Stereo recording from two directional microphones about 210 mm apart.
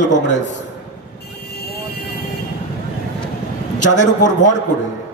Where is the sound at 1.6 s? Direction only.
50° left (ahead or behind).